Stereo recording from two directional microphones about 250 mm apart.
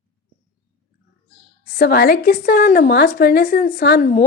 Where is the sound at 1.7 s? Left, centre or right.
Left.